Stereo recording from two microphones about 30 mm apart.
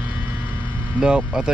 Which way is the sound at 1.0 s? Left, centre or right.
Right.